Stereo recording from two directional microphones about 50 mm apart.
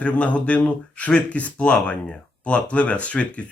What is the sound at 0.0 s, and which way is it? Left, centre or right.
Speech, left.